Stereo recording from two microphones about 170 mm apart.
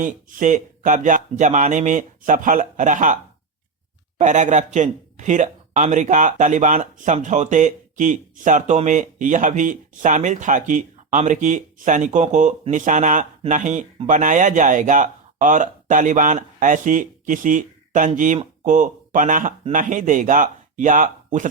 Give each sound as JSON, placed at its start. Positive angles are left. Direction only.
{"t": 0.0, "sound": "speech", "side_deg": -50}
{"t": 4.2, "sound": "speech", "side_deg": -45}